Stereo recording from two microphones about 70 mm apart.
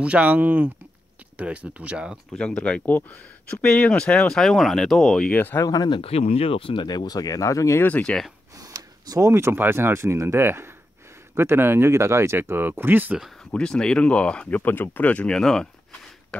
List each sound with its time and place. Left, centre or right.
0.0 s speech: centre
2.3 s speech: centre
3.6 s speech: centre
5.3 s speech: left
5.6 s speech: left
8.0 s speech: centre
8.5 s a sound: right
9.3 s speech: right
13.4 s speech: centre
15.2 s speech: centre